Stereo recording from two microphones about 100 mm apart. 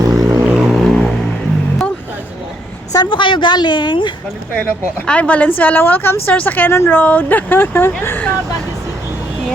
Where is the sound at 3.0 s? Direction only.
55° left (ahead or behind).